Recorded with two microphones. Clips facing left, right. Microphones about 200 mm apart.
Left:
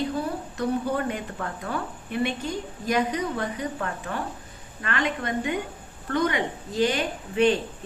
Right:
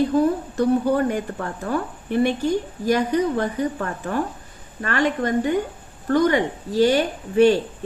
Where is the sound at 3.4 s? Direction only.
45° right (ahead or behind).